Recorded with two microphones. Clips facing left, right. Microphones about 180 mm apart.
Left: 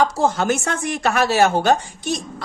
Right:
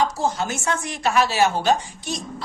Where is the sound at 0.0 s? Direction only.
60° left (ahead or behind).